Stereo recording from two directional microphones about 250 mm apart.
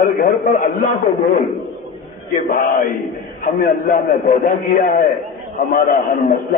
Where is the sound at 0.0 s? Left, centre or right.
Left.